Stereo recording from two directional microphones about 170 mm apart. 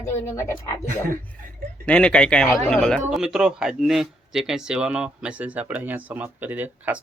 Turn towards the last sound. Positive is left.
turn(degrees=-10)  # may be behind; listen again after turning